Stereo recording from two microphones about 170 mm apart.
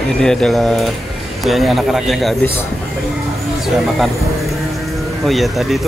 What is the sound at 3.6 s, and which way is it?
Speech, centre (ahead or behind).